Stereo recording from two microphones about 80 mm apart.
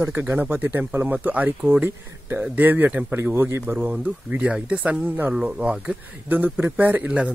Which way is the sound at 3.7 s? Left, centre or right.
Centre.